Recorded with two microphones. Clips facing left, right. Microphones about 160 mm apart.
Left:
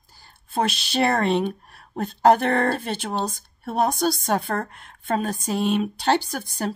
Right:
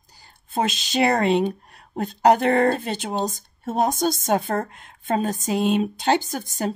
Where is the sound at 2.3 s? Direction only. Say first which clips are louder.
Right 3 dB; 20° right (ahead or behind).